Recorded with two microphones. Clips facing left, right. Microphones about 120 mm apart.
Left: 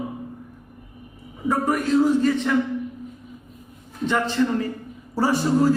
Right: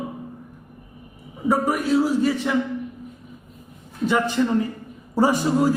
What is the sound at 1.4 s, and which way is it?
A man's voice, 10° right (ahead or behind).